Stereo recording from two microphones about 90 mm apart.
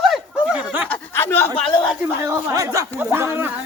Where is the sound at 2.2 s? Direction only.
35° right (ahead or behind).